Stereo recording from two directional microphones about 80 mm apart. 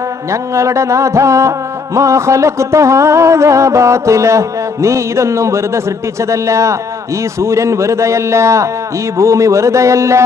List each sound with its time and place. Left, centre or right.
0.3 s music: right